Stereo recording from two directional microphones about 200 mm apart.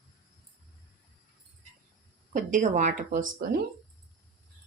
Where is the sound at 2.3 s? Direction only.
40° right (ahead or behind).